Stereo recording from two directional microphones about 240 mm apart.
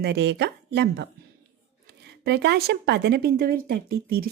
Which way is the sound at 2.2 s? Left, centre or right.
Right.